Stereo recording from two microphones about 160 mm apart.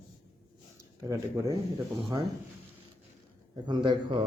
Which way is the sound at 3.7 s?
30° right (ahead or behind).